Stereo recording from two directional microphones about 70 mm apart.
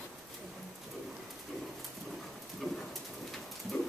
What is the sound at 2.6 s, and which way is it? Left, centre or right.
Rain, centre.